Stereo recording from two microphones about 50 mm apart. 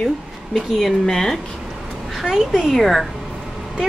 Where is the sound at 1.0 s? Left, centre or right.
Centre.